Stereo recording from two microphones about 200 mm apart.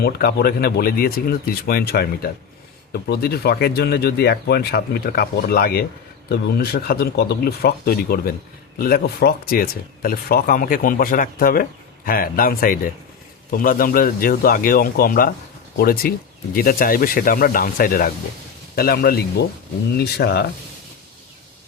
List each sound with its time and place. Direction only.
0.0 s speech: 50° left (ahead or behind)